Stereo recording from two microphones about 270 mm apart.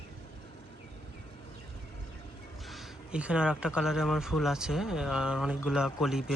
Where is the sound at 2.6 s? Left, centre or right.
Centre.